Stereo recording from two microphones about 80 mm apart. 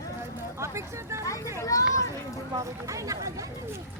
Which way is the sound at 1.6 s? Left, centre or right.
Left.